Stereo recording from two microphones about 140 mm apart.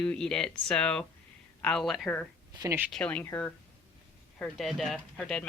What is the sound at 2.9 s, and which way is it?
Speech, 10° left (ahead or behind).